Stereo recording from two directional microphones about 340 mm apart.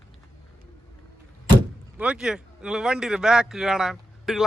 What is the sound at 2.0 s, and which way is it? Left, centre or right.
Speech, centre.